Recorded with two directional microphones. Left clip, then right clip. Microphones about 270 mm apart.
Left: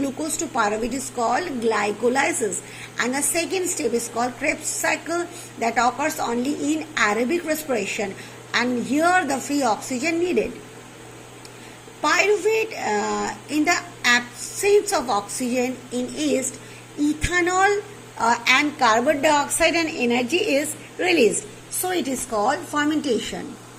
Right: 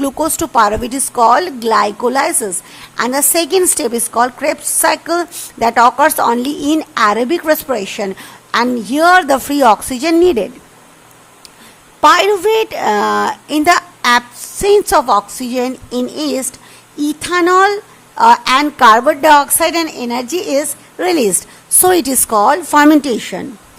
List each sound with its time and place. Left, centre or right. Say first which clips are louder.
0.0 s a woman's voice: right 10 dB; right
12.0 s a woman's voice: right 10 dB; right
21.8 s a woman's voice: right 13 dB; right